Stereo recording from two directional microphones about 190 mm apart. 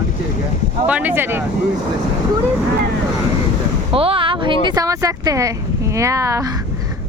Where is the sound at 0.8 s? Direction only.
10° right (ahead or behind).